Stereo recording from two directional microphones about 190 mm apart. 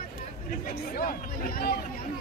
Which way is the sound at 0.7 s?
50° left (ahead or behind).